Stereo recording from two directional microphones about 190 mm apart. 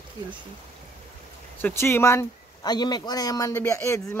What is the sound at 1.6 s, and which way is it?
Speech, 15° left (ahead or behind).